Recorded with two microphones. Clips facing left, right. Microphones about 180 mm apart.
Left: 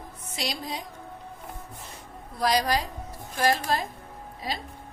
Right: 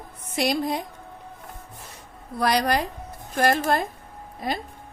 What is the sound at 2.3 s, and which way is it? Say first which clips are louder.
Speech: right 2 dB; 60° right (ahead or behind).